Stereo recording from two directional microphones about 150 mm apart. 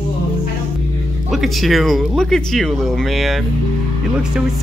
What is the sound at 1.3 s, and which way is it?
Speech, centre (ahead or behind).